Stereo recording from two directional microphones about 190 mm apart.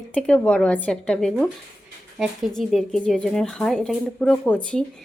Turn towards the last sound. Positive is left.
turn(degrees=5)  # may be behind; listen again after turning